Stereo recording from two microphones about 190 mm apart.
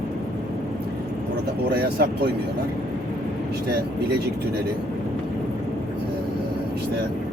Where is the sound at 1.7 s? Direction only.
55° right (ahead or behind).